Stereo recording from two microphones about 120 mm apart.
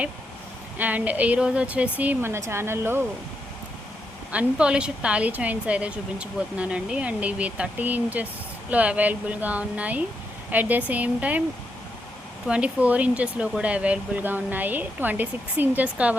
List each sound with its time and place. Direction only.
0.8 s a woman's voice: 15° right (ahead or behind)
4.3 s a woman's voice: 10° right (ahead or behind)
12.5 s a woman's voice: 10° right (ahead or behind)